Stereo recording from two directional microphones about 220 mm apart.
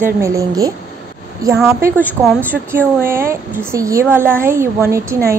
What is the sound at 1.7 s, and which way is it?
A woman's voice, 10° right (ahead or behind).